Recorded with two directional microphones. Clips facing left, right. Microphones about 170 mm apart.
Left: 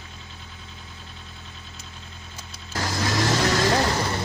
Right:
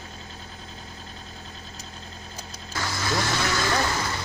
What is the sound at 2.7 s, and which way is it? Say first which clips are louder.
Vehicle: left 2 dB; 40° left (ahead or behind).